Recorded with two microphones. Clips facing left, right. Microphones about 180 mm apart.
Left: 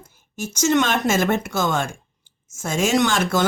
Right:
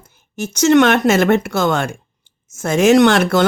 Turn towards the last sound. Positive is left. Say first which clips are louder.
# right 7 dB
turn(degrees=-65)  # may be behind; listen again after turning